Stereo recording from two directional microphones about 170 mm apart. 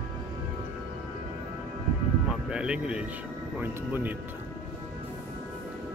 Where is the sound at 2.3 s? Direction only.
5° right (ahead or behind).